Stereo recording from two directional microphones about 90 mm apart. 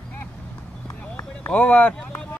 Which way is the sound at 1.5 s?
15° left (ahead or behind).